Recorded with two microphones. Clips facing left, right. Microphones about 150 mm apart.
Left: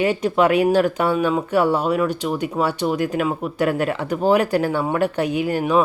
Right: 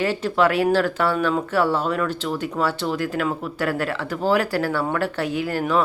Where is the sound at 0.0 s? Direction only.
15° left (ahead or behind).